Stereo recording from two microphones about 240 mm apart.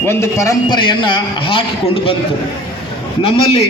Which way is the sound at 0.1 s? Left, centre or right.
Centre.